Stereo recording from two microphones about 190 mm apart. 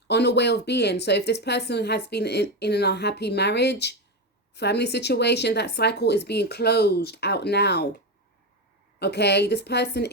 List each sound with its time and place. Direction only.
0.1 s a woman's voice: 60° left (ahead or behind)
9.0 s a woman's voice: 60° left (ahead or behind)